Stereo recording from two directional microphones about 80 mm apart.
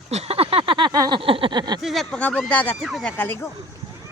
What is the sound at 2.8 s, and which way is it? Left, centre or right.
Speech, centre.